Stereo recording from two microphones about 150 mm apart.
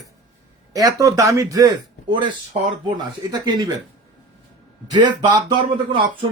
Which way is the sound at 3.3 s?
25° right (ahead or behind).